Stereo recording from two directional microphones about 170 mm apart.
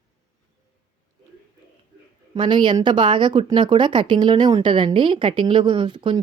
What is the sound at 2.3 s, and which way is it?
Speech, 25° right (ahead or behind).